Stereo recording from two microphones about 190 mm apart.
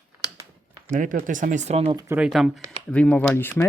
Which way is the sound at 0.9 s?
45° right (ahead or behind).